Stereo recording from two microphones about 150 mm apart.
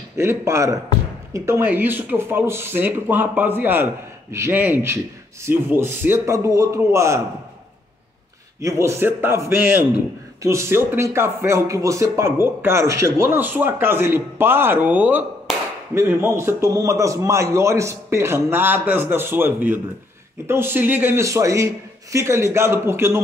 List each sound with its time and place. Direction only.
0.2 s speech: 20° right (ahead or behind)
8.5 s speech: 20° right (ahead or behind)